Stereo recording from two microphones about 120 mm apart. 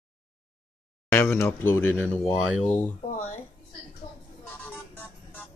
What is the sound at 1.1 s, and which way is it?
Speech, 20° left (ahead or behind).